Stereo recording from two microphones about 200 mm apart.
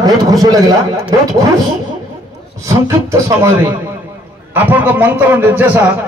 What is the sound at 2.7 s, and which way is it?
A man's voice, 15° right (ahead or behind).